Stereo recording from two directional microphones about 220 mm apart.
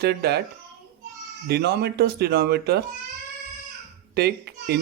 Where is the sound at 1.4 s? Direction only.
45° right (ahead or behind).